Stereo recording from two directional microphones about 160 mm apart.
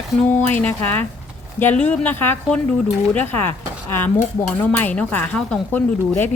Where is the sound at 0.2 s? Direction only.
10° left (ahead or behind).